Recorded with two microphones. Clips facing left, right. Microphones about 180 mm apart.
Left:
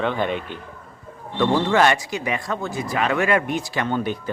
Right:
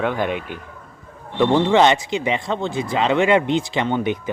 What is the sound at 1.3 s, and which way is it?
Speech, 20° right (ahead or behind).